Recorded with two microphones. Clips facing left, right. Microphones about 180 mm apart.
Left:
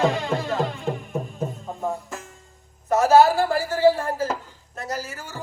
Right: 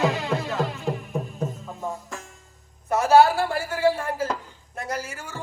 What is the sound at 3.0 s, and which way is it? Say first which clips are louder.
Speech: left 1 dB; 40° left (ahead or behind).